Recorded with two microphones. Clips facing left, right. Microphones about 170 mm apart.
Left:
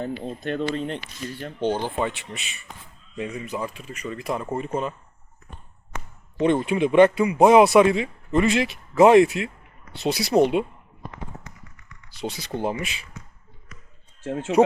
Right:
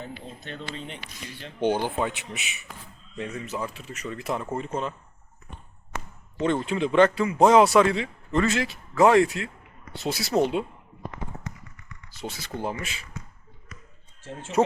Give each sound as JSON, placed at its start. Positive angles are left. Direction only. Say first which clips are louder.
{"t": 0.0, "sound": "speech", "louder": "left 10 dB", "side_deg": 55}
{"t": 1.6, "sound": "speech", "louder": "even", "side_deg": -15}
{"t": 3.2, "sound": "a man's voice", "louder": "left 2 dB", "side_deg": 15}
{"t": 6.4, "sound": "a man's voice", "louder": "left 4 dB", "side_deg": 15}
{"t": 12.2, "sound": "a man's voice", "louder": "left 4 dB", "side_deg": 20}